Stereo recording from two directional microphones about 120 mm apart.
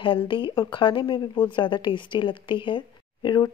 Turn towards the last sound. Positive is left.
turn(degrees=35)  # may be behind; listen again after turning